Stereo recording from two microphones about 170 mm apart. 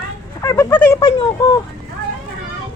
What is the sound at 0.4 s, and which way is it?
Speech, 15° left (ahead or behind).